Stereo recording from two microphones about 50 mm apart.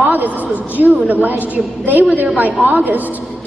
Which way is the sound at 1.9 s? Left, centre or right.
Right.